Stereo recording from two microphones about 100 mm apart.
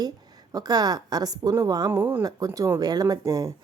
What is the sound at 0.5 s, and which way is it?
A woman's voice, 40° right (ahead or behind).